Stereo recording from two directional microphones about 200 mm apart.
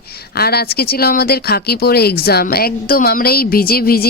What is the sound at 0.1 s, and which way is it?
Speech, 50° left (ahead or behind).